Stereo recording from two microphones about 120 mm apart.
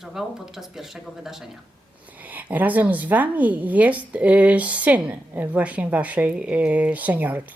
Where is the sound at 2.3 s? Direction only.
15° right (ahead or behind).